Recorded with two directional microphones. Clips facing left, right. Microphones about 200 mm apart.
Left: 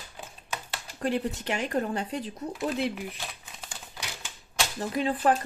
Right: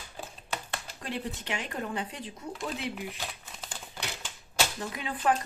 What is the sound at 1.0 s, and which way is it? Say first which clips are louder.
Speech: left 8 dB; 40° left (ahead or behind).